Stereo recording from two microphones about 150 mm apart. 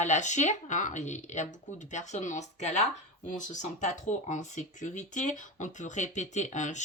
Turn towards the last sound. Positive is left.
turn(degrees=55)  # may be behind; listen again after turning